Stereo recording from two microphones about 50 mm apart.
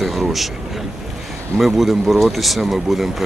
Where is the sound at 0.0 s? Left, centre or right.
Centre.